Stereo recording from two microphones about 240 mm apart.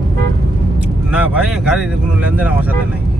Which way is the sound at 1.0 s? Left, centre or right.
Centre.